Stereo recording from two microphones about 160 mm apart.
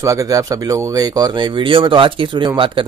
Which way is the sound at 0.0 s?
20° right (ahead or behind).